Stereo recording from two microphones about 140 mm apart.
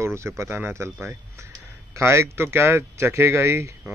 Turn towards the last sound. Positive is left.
turn(degrees=-20)  # may be behind; listen again after turning